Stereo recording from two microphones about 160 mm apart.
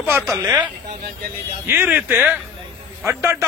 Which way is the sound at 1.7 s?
10° right (ahead or behind).